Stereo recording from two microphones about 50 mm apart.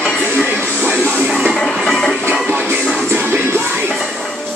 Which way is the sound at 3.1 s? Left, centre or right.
Right.